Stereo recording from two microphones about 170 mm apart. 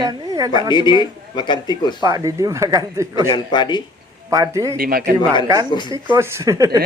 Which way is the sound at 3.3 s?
25° left (ahead or behind).